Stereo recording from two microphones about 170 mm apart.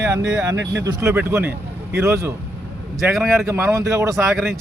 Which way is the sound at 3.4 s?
15° right (ahead or behind).